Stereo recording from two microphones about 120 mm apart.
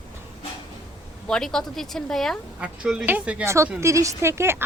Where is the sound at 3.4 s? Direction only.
25° right (ahead or behind).